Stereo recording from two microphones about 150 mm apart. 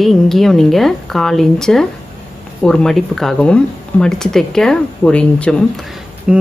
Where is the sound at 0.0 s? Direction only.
Centre (ahead or behind).